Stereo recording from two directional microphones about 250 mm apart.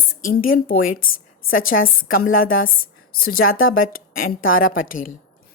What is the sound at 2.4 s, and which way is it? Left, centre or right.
A woman's voice, left.